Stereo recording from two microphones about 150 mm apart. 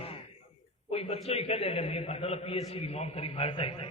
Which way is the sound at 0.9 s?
40° left (ahead or behind).